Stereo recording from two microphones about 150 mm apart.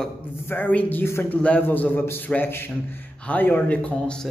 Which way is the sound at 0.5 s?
10° left (ahead or behind).